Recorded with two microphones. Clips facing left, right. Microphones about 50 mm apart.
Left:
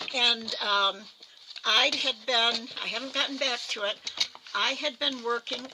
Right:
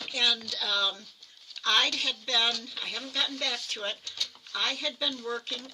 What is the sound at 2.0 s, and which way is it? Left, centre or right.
Speech, centre.